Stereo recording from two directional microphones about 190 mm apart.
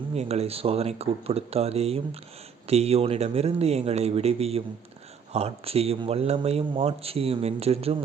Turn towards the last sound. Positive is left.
turn(degrees=-30)  # may be behind; listen again after turning